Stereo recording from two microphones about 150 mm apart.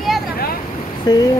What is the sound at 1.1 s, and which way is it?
Speech, 25° left (ahead or behind).